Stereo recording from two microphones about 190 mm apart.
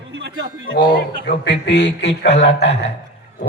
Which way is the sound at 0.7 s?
60° left (ahead or behind).